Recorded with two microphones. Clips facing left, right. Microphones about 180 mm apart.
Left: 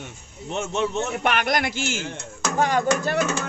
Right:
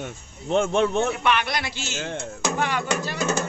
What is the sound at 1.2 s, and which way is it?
A man's voice, 45° left (ahead or behind).